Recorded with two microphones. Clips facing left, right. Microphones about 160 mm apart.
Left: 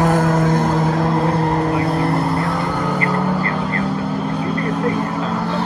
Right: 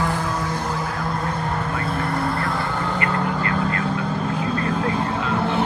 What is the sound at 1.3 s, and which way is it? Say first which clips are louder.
Vehicle: left 8 dB; 35° left (ahead or behind).